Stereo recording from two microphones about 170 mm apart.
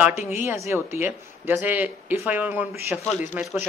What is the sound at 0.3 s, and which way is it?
Speech, 15° right (ahead or behind).